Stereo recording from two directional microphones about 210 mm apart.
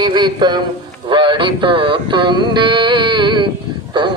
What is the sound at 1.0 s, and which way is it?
Music, 25° right (ahead or behind).